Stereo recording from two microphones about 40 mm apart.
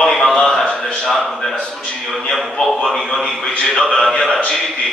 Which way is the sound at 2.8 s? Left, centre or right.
Centre.